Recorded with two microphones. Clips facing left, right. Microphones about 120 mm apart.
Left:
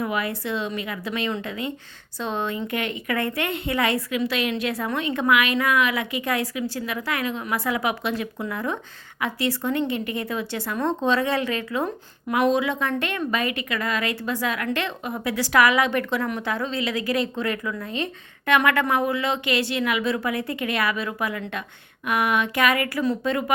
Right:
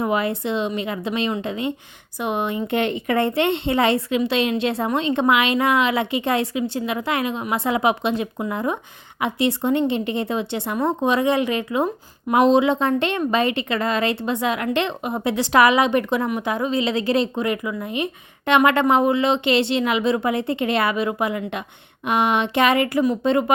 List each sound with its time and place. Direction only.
0.0 s a woman's voice: 25° right (ahead or behind)